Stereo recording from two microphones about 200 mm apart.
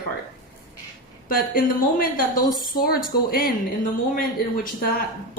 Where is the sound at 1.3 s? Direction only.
45° left (ahead or behind).